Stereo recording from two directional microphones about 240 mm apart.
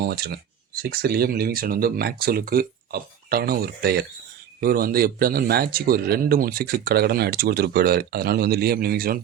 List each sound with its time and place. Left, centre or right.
0.0 s a man's voice: right